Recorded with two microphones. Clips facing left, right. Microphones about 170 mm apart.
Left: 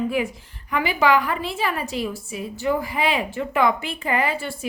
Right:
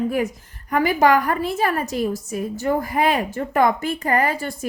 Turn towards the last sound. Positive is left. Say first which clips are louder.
# right 3 dB
turn(degrees=-40)  # may be behind; listen again after turning